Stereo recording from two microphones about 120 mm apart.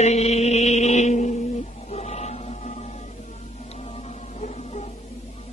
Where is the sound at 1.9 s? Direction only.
65° left (ahead or behind).